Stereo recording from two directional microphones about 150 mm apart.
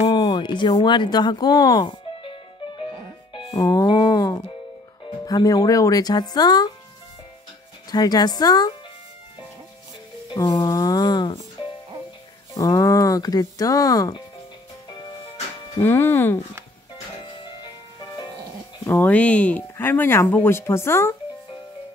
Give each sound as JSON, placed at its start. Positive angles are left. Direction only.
{"t": 0.1, "sound": "speech", "side_deg": 30}
{"t": 3.5, "sound": "speech", "side_deg": 25}
{"t": 7.9, "sound": "speech", "side_deg": 25}
{"t": 10.3, "sound": "speech", "side_deg": 30}
{"t": 12.5, "sound": "speech", "side_deg": 25}
{"t": 15.8, "sound": "speech", "side_deg": 15}
{"t": 18.9, "sound": "speech", "side_deg": 10}